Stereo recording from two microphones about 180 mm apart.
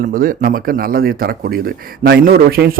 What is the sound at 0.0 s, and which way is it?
Speech, 50° right (ahead or behind).